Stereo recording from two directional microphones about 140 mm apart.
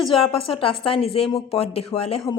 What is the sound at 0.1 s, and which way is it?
A woman's voice, 40° left (ahead or behind).